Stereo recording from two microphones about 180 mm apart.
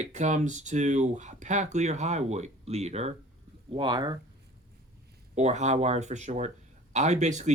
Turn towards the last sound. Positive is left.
turn(degrees=-40)  # may be behind; listen again after turning